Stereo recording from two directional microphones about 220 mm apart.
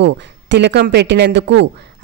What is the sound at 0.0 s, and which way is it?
A man's voice, 50° right (ahead or behind).